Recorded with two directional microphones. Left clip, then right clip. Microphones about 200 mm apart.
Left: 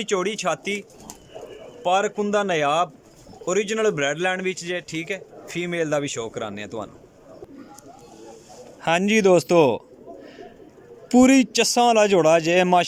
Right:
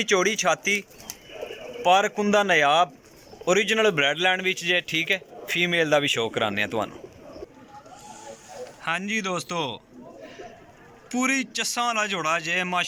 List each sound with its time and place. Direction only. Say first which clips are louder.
0.0 s speech: right 2 dB; 5° left (ahead or behind)
8.8 s a man's voice: left 8 dB; 50° left (ahead or behind)
11.1 s a man's voice: left 8 dB; 50° left (ahead or behind)